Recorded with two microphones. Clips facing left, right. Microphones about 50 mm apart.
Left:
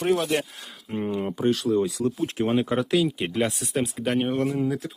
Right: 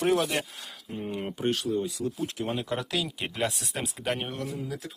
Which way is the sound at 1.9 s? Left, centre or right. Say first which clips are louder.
Left 6 dB; left.